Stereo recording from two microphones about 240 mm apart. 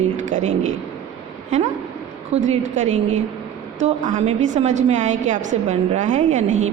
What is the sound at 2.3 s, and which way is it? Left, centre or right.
A woman's voice, right.